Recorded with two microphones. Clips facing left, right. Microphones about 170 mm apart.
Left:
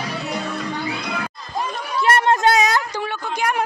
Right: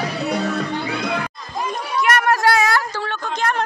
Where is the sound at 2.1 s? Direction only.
25° left (ahead or behind).